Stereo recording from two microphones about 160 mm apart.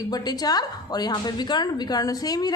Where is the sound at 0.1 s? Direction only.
25° left (ahead or behind).